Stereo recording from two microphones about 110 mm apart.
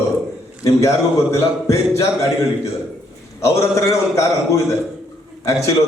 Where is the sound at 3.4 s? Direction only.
25° left (ahead or behind).